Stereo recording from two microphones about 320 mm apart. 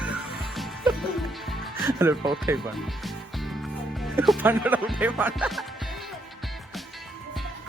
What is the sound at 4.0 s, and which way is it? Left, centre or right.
Speech, centre.